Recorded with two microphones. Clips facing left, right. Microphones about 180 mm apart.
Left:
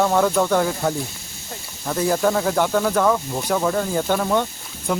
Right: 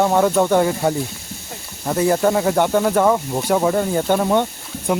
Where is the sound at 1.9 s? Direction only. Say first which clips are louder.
Right 3 dB; 5° right (ahead or behind).